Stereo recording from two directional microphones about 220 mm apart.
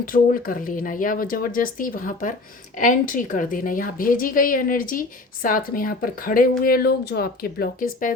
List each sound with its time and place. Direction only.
0.0 s a woman's voice: 40° left (ahead or behind)